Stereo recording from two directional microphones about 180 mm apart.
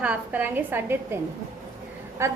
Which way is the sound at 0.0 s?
10° right (ahead or behind).